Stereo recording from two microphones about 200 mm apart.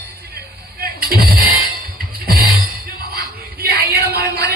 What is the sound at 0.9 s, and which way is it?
Music, 50° right (ahead or behind).